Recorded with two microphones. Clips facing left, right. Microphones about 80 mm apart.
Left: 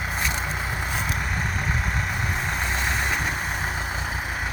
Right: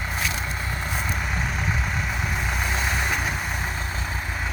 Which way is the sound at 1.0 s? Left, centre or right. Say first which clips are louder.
Even; centre.